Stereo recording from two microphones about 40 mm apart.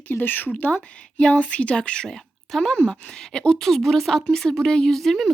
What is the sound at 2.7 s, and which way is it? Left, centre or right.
Speech, left.